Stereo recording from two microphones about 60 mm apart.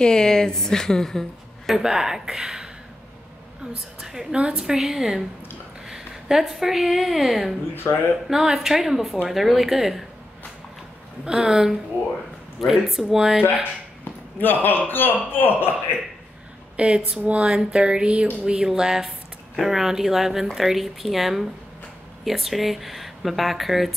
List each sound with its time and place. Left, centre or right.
0.0 s a woman's voice: centre
1.7 s speech: centre
4.0 s speech: centre
7.7 s speech: left
8.3 s speech: centre
11.2 s speech: centre
14.0 s a sound: left
14.9 s speech: left
16.7 s a woman's voice: centre
18.4 s speech: centre